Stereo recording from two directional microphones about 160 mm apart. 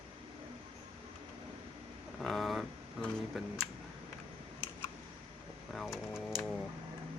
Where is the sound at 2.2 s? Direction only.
Centre (ahead or behind).